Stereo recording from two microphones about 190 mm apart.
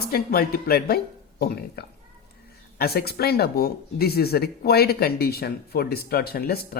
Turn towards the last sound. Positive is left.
turn(degrees=55)  # may be behind; listen again after turning